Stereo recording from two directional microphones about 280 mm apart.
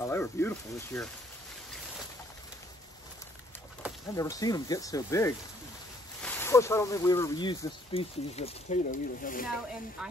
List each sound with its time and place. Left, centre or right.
0.0 s speech: centre
4.2 s speech: centre; by 9.5 s left